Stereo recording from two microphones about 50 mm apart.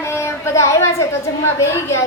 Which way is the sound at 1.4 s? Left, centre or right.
Left.